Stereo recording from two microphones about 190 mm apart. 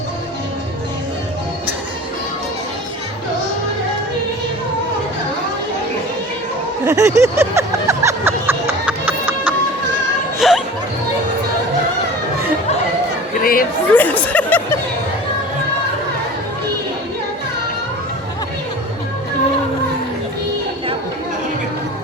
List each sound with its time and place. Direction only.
6.8 s speech: 15° right (ahead or behind)
7.2 s snicker: 15° right (ahead or behind)
10.3 s music: centre (ahead or behind)
13.4 s chatter: 50° left (ahead or behind)
13.9 s a sound: 10° left (ahead or behind)